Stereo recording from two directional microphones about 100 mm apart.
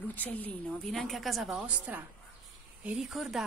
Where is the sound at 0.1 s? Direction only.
15° left (ahead or behind).